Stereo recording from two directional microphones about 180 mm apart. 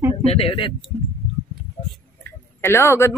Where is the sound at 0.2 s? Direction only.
35° left (ahead or behind).